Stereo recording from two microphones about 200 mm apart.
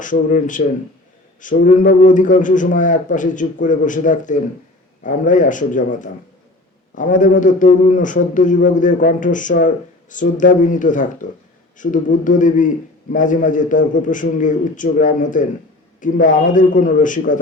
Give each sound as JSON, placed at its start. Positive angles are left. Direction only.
{"t": 0.0, "sound": "a man's voice", "side_deg": 40}